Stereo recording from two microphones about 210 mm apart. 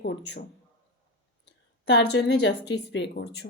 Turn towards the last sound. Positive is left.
turn(degrees=55)  # may be behind; listen again after turning